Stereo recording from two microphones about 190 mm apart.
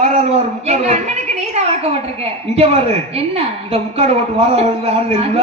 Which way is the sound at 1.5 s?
30° right (ahead or behind).